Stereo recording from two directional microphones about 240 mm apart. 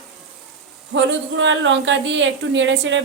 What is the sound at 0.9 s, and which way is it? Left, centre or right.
A woman's voice, right.